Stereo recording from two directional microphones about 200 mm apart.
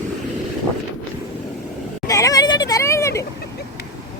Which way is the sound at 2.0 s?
15° left (ahead or behind).